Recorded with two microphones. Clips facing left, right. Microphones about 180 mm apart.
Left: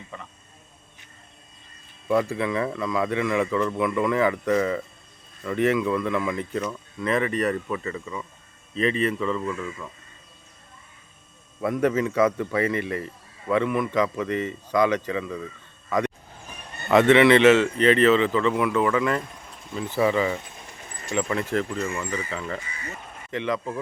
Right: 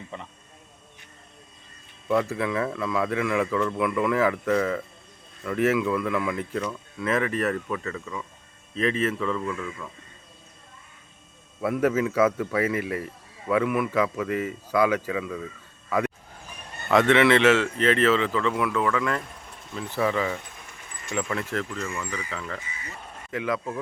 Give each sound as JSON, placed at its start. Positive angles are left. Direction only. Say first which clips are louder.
{"t": 0.1, "sound": "speech", "louder": "right 2 dB", "side_deg": -25}
{"t": 2.0, "sound": "speech", "louder": "left 1 dB", "side_deg": 0}
{"t": 11.6, "sound": "speech", "louder": "left 1 dB", "side_deg": -5}
{"t": 15.9, "sound": "vehicle", "louder": "left 1 dB", "side_deg": -5}
{"t": 16.9, "sound": "speech", "louder": "left 3 dB", "side_deg": 0}